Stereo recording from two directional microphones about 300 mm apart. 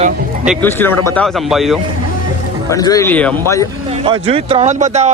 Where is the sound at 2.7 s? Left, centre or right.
Centre.